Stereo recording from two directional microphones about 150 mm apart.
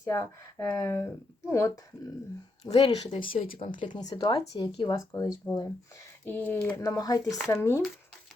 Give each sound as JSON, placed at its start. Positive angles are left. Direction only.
{"t": 0.0, "sound": "speech", "side_deg": 20}
{"t": 2.6, "sound": "speech", "side_deg": 40}
{"t": 6.2, "sound": "speech", "side_deg": 10}